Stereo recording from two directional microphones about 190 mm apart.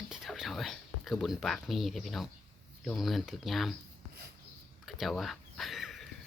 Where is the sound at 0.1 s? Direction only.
Centre (ahead or behind).